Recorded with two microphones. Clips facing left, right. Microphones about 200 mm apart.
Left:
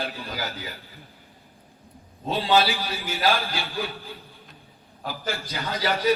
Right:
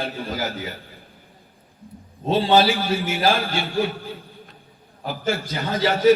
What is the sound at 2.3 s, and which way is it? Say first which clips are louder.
A man's voice: right 5 dB; 25° right (ahead or behind).